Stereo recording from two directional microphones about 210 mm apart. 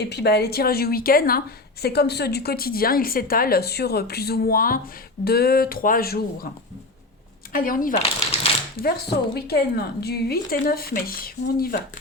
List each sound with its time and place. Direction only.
0.0 s a woman's voice: 50° left (ahead or behind)
7.5 s speech: 40° left (ahead or behind)
7.9 s speech: 30° left (ahead or behind)
9.3 s a woman's voice: 50° left (ahead or behind)